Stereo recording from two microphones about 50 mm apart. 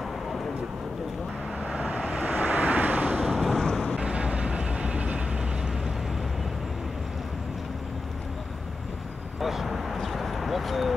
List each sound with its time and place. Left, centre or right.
1.7 s vehicle: right
3.3 s boat: centre
3.6 s vehicle: centre
3.9 s vehicle: right
9.4 s a sound: centre